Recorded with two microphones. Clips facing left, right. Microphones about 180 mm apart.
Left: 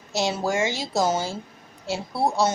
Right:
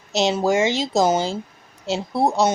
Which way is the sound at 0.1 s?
20° right (ahead or behind).